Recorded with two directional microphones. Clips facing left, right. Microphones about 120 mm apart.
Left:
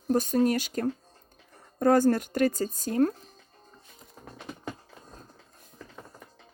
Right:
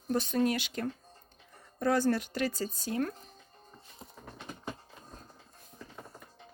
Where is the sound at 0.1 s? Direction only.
40° left (ahead or behind).